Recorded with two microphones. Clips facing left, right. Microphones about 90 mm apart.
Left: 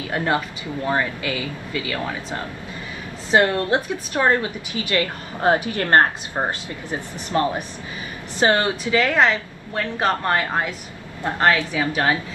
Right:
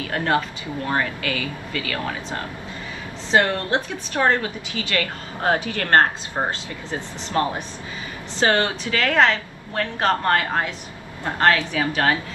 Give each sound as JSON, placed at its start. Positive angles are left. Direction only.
{"t": 0.0, "sound": "a woman's voice", "side_deg": 20}
{"t": 8.4, "sound": "a woman's voice", "side_deg": 20}